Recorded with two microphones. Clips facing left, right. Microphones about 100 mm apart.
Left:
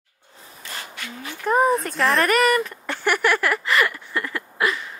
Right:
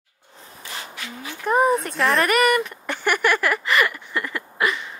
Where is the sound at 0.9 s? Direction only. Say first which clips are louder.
Even; 5° right (ahead or behind).